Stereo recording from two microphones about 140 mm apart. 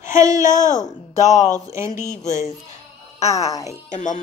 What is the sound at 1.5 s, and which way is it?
Speech, 25° right (ahead or behind).